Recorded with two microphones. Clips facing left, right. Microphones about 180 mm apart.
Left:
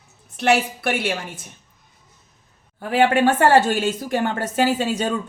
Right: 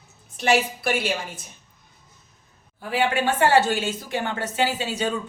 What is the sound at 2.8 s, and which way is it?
A woman's voice, 60° left (ahead or behind).